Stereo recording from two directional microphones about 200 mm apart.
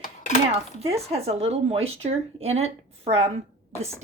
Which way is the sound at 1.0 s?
30° right (ahead or behind).